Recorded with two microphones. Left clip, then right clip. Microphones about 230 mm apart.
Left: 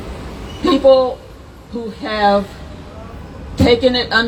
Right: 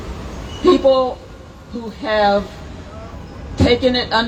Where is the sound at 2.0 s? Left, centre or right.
Left.